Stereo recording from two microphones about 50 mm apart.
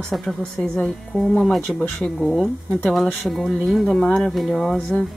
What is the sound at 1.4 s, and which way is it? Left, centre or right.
Speech, centre.